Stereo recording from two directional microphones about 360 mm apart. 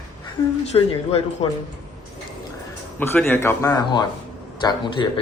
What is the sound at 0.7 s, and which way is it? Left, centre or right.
Speech, centre.